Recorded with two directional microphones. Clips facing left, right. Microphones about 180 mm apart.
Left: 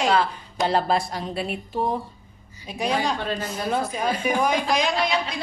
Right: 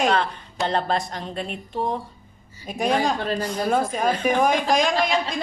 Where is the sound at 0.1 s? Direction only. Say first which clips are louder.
Left 1 dB; 5° left (ahead or behind).